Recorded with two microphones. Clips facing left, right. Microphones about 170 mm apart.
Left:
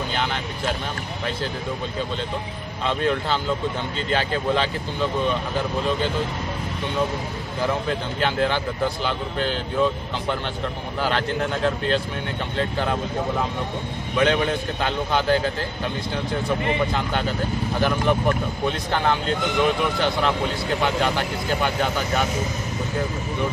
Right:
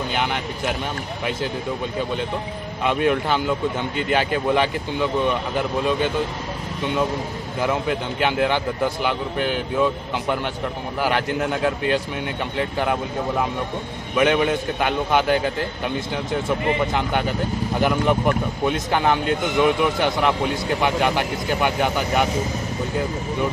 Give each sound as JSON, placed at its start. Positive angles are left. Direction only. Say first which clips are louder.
{"t": 0.1, "sound": "speech", "louder": "right 2 dB", "side_deg": -15}
{"t": 2.8, "sound": "speech", "louder": "right 3 dB", "side_deg": -15}
{"t": 7.6, "sound": "speech", "louder": "right 2 dB", "side_deg": -15}
{"t": 11.0, "sound": "speech", "louder": "right 2 dB", "side_deg": -15}
{"t": 14.2, "sound": "speech", "louder": "right 2 dB", "side_deg": -15}